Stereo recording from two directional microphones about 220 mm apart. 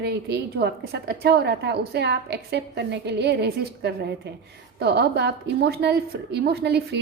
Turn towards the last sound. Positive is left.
turn(degrees=-50)  # may be behind; listen again after turning